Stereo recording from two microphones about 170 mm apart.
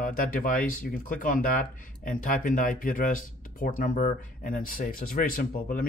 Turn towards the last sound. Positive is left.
turn(degrees=55)  # may be behind; listen again after turning